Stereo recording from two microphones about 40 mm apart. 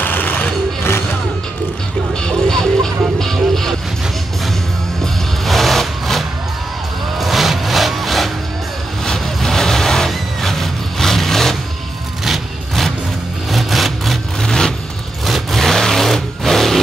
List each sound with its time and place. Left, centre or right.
0.0 s sewing machine: left
2.2 s music: centre
5.0 s music: centre
9.0 s vehicle: centre
13.5 s vehicle: centre
14.4 s vehicle: centre
15.2 s sewing machine: centre